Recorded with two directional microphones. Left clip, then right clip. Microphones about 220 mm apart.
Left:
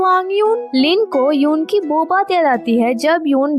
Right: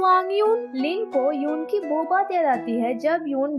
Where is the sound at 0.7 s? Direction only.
40° left (ahead or behind).